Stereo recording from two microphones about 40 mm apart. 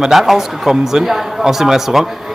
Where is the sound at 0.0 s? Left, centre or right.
Centre.